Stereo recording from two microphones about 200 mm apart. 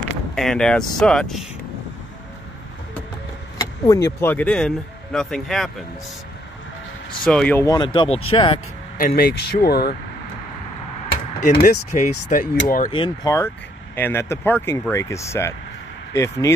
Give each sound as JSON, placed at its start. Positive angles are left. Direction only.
{"t": 0.3, "sound": "speech", "side_deg": 5}
{"t": 3.5, "sound": "speech", "side_deg": 15}
{"t": 7.2, "sound": "speech", "side_deg": 5}
{"t": 7.6, "sound": "speech", "side_deg": 20}
{"t": 8.9, "sound": "speech", "side_deg": 45}
{"t": 11.4, "sound": "speech", "side_deg": 45}
{"t": 12.9, "sound": "speech", "side_deg": 25}
{"t": 13.9, "sound": "speech", "side_deg": 10}